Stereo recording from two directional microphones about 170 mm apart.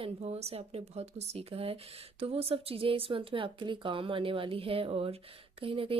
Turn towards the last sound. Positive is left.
turn(degrees=-35)  # may be behind; listen again after turning